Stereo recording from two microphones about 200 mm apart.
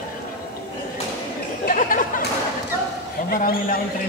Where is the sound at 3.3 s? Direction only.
45° left (ahead or behind).